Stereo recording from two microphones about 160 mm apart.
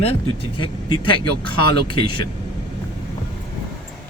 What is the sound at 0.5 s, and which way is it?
Speech, 30° left (ahead or behind).